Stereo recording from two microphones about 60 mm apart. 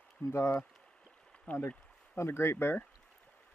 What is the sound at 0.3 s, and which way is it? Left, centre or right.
Speech, left.